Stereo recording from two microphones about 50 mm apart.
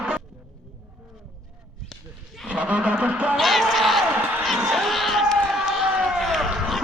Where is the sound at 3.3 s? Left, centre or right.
Centre.